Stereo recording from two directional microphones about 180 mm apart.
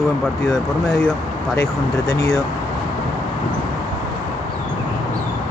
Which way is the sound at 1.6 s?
20° left (ahead or behind).